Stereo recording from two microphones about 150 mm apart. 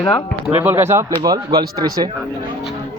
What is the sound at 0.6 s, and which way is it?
Speech, 15° right (ahead or behind).